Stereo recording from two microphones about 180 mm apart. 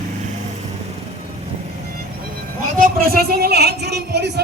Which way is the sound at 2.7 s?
50° right (ahead or behind).